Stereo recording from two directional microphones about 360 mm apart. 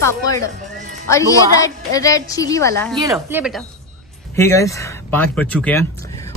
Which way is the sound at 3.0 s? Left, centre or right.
Centre.